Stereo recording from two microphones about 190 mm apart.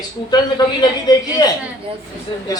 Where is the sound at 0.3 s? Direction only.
20° left (ahead or behind).